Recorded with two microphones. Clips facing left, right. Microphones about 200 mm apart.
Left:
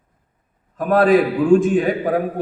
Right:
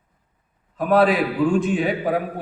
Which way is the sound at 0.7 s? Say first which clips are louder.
Left 3 dB; 45° left (ahead or behind).